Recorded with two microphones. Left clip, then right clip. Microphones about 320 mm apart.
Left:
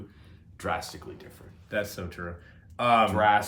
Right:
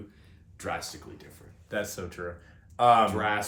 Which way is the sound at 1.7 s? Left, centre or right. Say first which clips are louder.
Left 1 dB; centre.